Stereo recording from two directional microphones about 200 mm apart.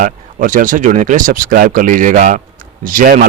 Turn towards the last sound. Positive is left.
turn(degrees=-45)  # may be behind; listen again after turning